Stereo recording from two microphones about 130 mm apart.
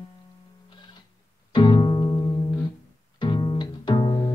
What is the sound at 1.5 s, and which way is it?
Music, 35° left (ahead or behind).